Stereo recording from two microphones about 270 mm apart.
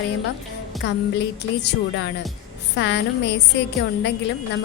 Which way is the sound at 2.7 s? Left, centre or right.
Left.